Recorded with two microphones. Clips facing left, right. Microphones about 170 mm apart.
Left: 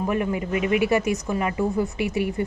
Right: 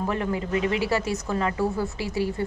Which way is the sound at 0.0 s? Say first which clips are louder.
Left 2 dB; 15° left (ahead or behind).